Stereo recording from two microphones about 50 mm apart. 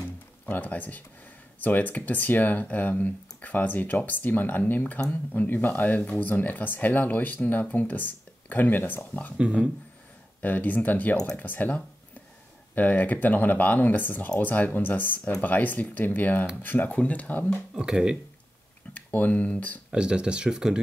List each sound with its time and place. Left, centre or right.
0.5 s speech: left
9.4 s speech: right
10.4 s speech: left
16.9 s speech: left
17.7 s speech: centre
18.9 s speech: left
19.9 s speech: centre